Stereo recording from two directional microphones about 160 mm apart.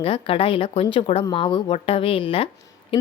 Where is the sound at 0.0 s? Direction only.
35° left (ahead or behind).